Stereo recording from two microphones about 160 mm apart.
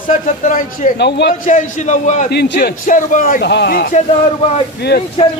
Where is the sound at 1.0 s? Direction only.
90° left.